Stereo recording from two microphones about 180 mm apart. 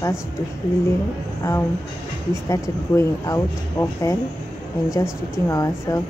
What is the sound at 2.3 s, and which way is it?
Speech, 15° left (ahead or behind).